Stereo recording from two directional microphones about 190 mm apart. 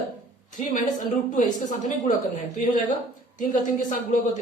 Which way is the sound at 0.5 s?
40° left (ahead or behind).